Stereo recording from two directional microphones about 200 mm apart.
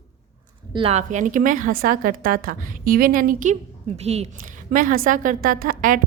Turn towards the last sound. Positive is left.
turn(degrees=-45)  # may be behind; listen again after turning